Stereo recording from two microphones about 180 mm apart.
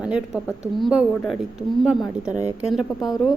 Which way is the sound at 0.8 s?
Centre (ahead or behind).